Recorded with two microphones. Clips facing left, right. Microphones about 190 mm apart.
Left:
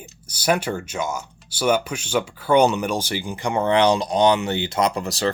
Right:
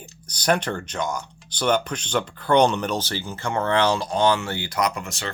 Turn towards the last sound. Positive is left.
turn(degrees=35)  # may be behind; listen again after turning